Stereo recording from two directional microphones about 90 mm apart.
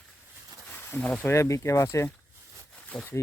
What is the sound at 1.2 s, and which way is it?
Speech, 30° left (ahead or behind).